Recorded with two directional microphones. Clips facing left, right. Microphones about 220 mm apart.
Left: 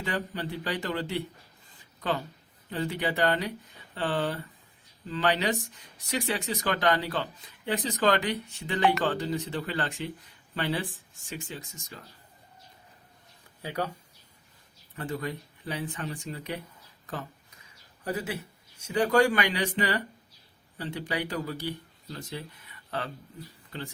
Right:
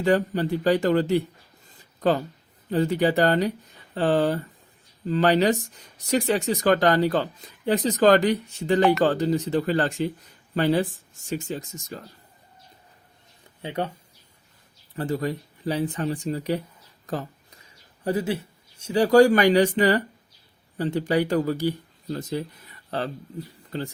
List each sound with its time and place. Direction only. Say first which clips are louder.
0.0 s speech: right 11 dB; 45° right (ahead or behind)
13.6 s speech: right 4 dB; 25° right (ahead or behind)
14.9 s speech: right 7 dB; 35° right (ahead or behind)
17.1 s a sound: right 7 dB; 35° right (ahead or behind)
18.8 s speech: right 7 dB; 30° right (ahead or behind)